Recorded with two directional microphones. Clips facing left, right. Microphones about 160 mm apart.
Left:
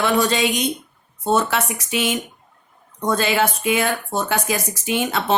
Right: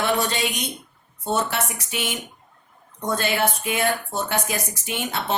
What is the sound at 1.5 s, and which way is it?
Speech, 90° left.